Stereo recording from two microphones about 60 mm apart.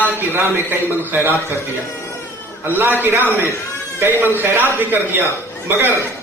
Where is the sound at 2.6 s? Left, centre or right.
Right.